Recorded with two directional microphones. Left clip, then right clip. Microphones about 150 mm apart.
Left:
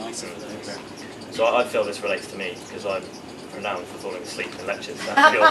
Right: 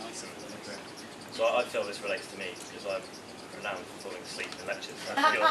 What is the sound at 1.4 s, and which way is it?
Speech, 20° left (ahead or behind).